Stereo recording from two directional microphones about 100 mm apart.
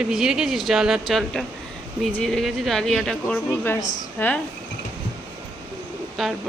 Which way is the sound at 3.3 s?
20° left (ahead or behind).